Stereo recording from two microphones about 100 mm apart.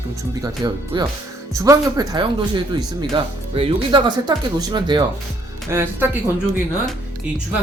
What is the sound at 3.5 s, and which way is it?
Speech, 70° right (ahead or behind).